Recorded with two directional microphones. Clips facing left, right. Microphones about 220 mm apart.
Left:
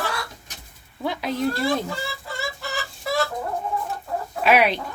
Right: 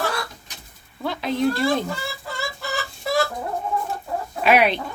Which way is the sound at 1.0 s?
10° left (ahead or behind).